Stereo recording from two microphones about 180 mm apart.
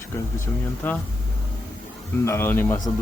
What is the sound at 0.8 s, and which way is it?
Speech, 10° left (ahead or behind).